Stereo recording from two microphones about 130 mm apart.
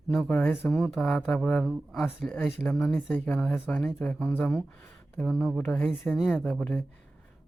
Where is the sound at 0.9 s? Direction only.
5° left (ahead or behind).